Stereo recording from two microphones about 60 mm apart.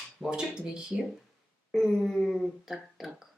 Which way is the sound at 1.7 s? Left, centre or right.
Centre.